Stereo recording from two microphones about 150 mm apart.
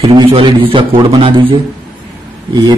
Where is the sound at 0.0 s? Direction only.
35° right (ahead or behind).